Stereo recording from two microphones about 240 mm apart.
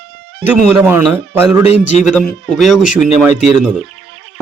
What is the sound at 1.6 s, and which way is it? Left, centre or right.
Speech, left.